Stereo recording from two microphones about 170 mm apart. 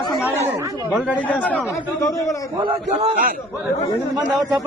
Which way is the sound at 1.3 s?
10° left (ahead or behind).